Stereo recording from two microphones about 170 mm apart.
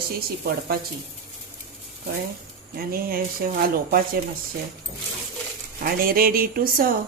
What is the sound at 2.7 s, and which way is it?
A woman's voice, 60° right (ahead or behind).